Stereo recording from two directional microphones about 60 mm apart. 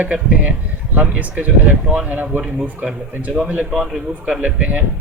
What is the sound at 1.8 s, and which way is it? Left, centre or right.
Speech, centre.